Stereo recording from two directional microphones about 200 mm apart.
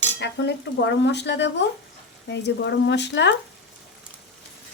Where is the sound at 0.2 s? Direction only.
60° left (ahead or behind).